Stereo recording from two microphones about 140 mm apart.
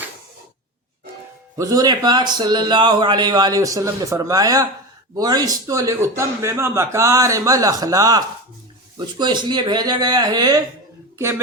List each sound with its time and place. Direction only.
1.5 s a man's voice: 25° right (ahead or behind)